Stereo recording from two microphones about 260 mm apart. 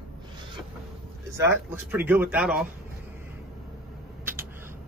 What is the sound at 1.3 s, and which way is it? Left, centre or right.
Speech, centre.